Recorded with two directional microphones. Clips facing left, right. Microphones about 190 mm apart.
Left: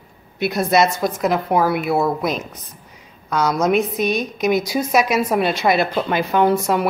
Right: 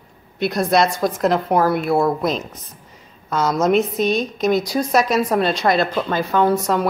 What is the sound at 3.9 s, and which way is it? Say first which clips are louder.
Speech: right 1 dB; 25° right (ahead or behind).